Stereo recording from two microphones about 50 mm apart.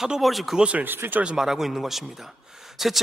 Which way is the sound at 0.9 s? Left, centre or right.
Right.